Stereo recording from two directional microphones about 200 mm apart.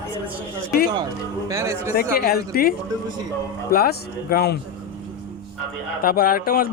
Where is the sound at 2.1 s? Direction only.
50° left (ahead or behind).